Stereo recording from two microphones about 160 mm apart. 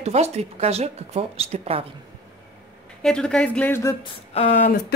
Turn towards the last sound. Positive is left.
turn(degrees=45)  # may be behind; listen again after turning